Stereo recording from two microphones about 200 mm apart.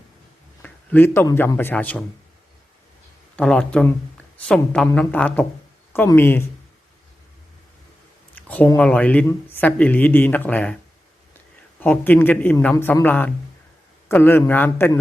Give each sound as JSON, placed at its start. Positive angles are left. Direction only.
{"t": 0.6, "sound": "a man's voice", "side_deg": 10}
{"t": 3.3, "sound": "speech", "side_deg": 5}
{"t": 8.4, "sound": "speech", "side_deg": 10}
{"t": 11.8, "sound": "speech", "side_deg": 10}